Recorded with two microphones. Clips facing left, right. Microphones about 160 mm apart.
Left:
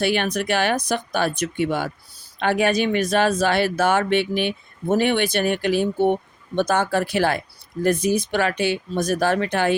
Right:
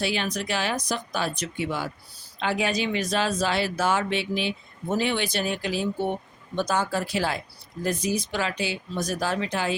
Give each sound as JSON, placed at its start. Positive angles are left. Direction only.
{"t": 0.0, "sound": "speech", "side_deg": 60}